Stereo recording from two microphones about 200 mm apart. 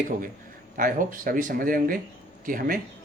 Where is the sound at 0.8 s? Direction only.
45° right (ahead or behind).